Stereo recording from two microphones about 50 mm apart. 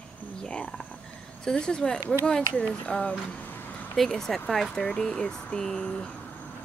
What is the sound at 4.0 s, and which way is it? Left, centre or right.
Speech, centre.